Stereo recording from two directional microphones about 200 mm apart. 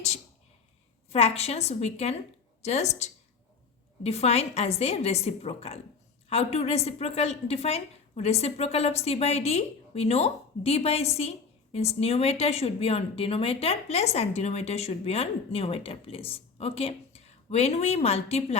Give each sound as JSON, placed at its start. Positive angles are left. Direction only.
{"t": 1.1, "sound": "a woman's voice", "side_deg": 30}